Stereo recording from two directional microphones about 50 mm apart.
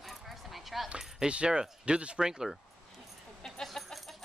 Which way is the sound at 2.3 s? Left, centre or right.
Centre.